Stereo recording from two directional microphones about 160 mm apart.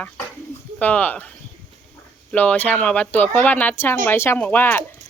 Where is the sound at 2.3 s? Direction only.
10° left (ahead or behind).